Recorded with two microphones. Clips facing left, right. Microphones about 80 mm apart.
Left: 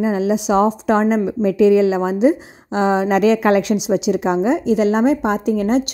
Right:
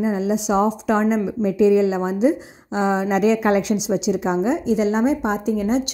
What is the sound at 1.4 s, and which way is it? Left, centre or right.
A woman's voice, left.